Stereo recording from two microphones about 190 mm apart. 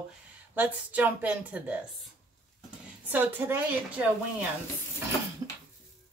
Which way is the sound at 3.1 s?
10° right (ahead or behind).